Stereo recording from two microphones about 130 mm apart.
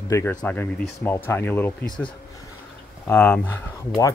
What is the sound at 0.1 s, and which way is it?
Speech, 15° left (ahead or behind).